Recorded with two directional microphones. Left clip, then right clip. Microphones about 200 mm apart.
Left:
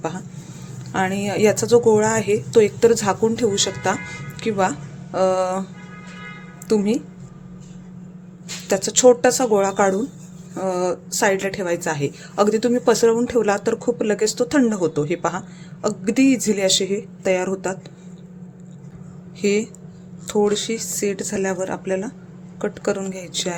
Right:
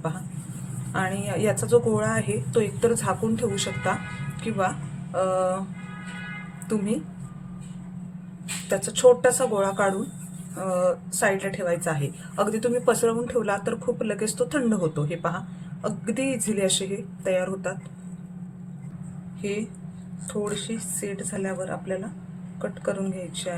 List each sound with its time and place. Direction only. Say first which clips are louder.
0.9 s speech: left 6 dB; 40° left (ahead or behind)
4.4 s speech: left 6 dB; 45° left (ahead or behind)
6.7 s speech: left 9 dB; 40° left (ahead or behind)
8.7 s speech: left 4 dB; 40° left (ahead or behind)
19.4 s speech: left 10 dB; 45° left (ahead or behind)